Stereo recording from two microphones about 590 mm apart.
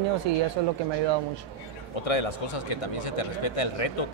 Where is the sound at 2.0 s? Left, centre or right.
Left.